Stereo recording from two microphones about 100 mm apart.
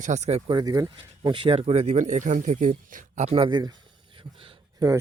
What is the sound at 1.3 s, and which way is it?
Speech, 65° right (ahead or behind).